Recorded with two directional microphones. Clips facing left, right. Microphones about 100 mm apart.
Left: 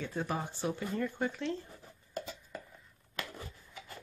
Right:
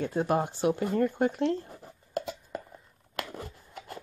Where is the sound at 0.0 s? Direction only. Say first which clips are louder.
Right 9 dB; 55° right (ahead or behind).